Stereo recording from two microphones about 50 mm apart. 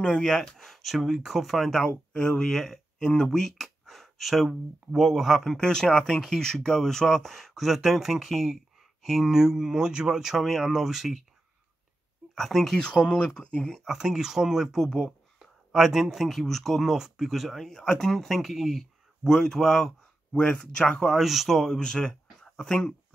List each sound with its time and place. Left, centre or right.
0.0 s speech: centre
0.3 s speech: centre
1.7 s speech: centre
3.3 s a sound: centre
4.5 s speech: centre
5.5 s speech: centre
12.4 s speech: centre
13.8 s speech: centre
14.8 s speech: centre
15.3 s speech: centre
16.9 s speech: centre
20.3 s speech: left
21.1 s speech: centre